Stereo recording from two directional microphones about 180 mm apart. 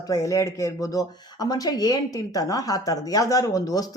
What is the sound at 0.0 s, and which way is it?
A woman's voice, 20° left (ahead or behind).